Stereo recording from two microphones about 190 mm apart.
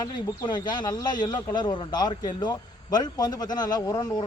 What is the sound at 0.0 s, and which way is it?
A man's voice, 25° left (ahead or behind).